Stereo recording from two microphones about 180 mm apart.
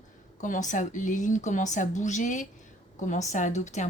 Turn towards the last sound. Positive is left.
turn(degrees=40)  # may be behind; listen again after turning